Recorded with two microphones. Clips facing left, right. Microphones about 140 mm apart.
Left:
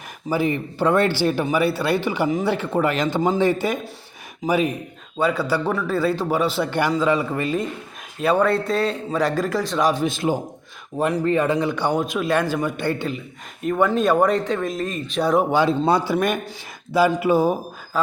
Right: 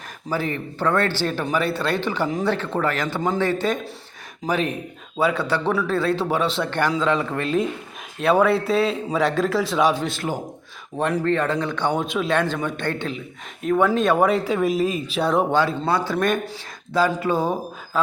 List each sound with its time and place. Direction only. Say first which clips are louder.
0.3 s a man's voice: left 4 dB; 15° left (ahead or behind); by 10.1 s centre (ahead or behind)
10.1 s speech: left 5 dB; 15° left (ahead or behind)
10.9 s a man's voice: left 1 dB; 5° left (ahead or behind)
15.5 s speech: left 3 dB; 15° left (ahead or behind)